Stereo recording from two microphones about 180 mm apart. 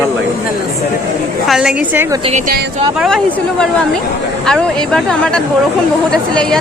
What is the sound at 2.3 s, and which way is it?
Speech, 40° right (ahead or behind).